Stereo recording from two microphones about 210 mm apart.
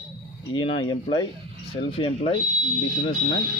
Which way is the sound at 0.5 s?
25° left (ahead or behind).